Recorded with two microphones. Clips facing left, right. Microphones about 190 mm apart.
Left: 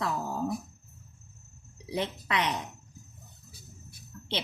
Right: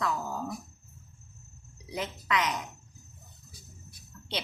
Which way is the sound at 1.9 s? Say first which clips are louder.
Left 1 dB; 30° left (ahead or behind).